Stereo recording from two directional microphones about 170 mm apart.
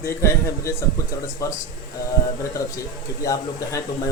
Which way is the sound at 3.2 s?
20° left (ahead or behind).